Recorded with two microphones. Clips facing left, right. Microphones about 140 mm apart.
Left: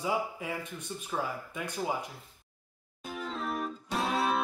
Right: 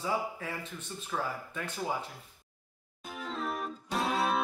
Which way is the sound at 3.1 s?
Centre (ahead or behind).